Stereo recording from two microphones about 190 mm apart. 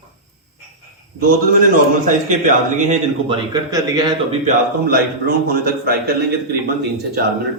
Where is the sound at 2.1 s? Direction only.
40° right (ahead or behind).